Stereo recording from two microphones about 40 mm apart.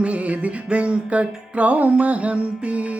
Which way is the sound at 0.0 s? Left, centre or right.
Right.